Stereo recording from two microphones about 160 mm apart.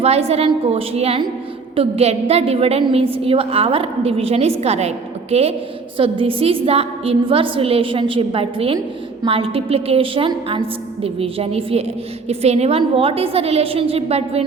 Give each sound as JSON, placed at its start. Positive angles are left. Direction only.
{"t": 0.0, "sound": "a woman's voice", "side_deg": -40}